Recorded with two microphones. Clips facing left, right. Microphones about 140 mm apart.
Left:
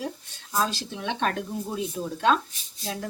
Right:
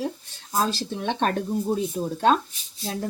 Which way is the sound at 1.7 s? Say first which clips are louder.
Right 4 dB; 40° right (ahead or behind).